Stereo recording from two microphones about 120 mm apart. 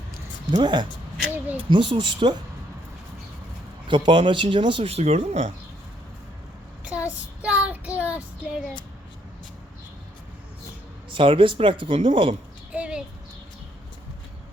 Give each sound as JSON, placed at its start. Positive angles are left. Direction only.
{"t": 0.5, "sound": "speech", "side_deg": -40}
{"t": 1.3, "sound": "a sound", "side_deg": -15}
{"t": 1.7, "sound": "speech", "side_deg": -45}
{"t": 3.8, "sound": "speech", "side_deg": -40}
{"t": 6.8, "sound": "child singing", "side_deg": -10}
{"t": 11.1, "sound": "speech", "side_deg": -45}
{"t": 12.7, "sound": "a sound", "side_deg": -10}